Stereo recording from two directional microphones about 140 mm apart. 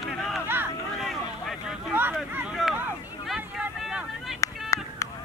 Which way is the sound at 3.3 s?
Centre (ahead or behind).